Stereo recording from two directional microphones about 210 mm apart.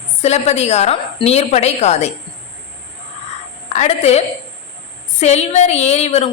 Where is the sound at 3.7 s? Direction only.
35° left (ahead or behind).